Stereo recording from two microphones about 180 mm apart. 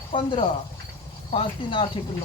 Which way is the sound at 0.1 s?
25° left (ahead or behind).